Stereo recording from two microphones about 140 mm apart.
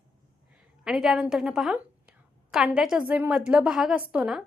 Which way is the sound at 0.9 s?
Centre (ahead or behind).